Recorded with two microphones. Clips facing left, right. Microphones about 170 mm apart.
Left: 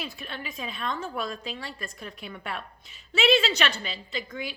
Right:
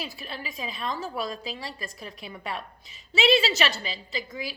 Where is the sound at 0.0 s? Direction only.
Centre (ahead or behind).